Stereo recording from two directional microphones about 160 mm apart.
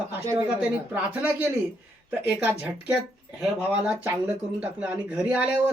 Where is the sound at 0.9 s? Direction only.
10° right (ahead or behind).